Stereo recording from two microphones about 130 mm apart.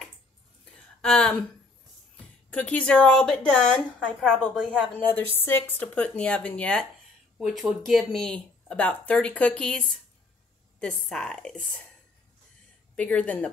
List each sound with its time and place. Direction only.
1.0 s speech: 5° left (ahead or behind)
2.5 s a woman's voice: 10° left (ahead or behind)
5.3 s a woman's voice: 15° left (ahead or behind)
7.3 s speech: centre (ahead or behind)
12.9 s a woman's voice: 10° left (ahead or behind)